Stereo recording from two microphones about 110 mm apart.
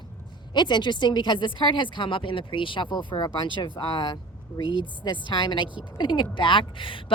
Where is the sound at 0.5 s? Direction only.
45° left (ahead or behind).